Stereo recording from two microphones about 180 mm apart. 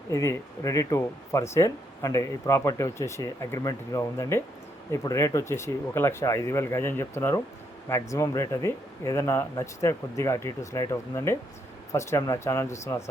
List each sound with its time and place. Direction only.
0.1 s speech: 15° left (ahead or behind)